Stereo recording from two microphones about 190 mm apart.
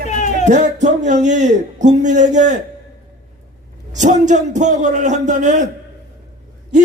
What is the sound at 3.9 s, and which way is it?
Speech, 40° right (ahead or behind).